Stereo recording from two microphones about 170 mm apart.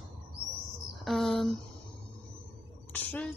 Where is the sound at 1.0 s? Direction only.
Centre (ahead or behind).